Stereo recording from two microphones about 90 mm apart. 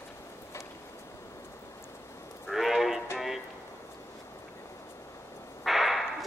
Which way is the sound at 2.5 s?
Centre (ahead or behind).